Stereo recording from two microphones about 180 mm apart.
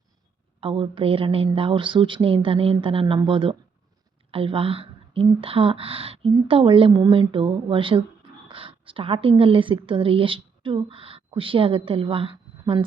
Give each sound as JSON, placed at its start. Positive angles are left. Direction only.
{"t": 0.6, "sound": "a woman's voice", "side_deg": -30}